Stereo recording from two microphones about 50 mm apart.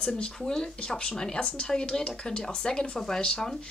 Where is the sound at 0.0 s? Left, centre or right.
Centre.